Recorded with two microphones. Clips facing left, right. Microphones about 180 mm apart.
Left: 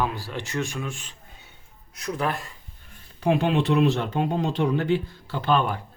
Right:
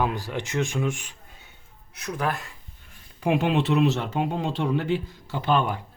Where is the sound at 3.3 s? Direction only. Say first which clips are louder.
Right 1 dB; 5° right (ahead or behind).